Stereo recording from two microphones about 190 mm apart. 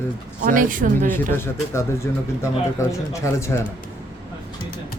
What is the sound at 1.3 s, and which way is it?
Speech, 15° left (ahead or behind).